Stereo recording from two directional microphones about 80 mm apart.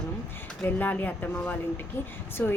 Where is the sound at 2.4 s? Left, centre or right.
Left.